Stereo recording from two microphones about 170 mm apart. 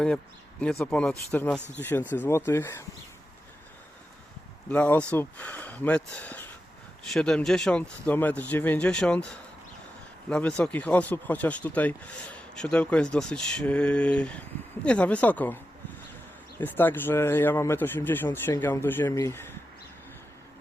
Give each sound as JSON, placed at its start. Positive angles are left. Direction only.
{"t": 0.6, "sound": "speech", "side_deg": 5}
{"t": 4.7, "sound": "speech", "side_deg": 5}